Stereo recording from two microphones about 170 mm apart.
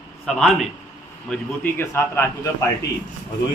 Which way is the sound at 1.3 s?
10° left (ahead or behind).